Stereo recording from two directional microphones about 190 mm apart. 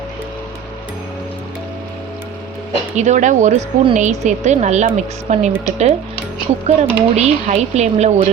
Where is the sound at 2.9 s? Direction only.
40° right (ahead or behind).